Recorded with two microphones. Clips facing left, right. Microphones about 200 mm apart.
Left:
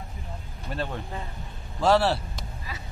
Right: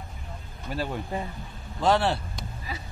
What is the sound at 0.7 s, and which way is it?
Speech, 10° right (ahead or behind).